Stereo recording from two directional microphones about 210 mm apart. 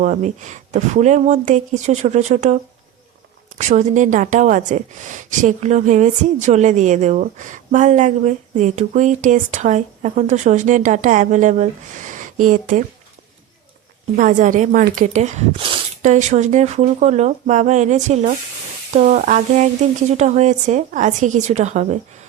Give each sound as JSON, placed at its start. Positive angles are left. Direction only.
{"t": 0.0, "sound": "speech", "side_deg": -35}
{"t": 3.6, "sound": "speech", "side_deg": -35}
{"t": 14.2, "sound": "speech", "side_deg": -40}